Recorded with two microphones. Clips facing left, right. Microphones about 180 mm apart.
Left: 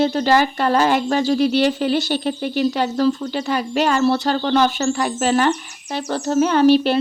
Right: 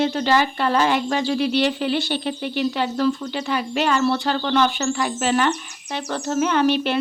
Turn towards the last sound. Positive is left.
turn(degrees=35)  # may be behind; listen again after turning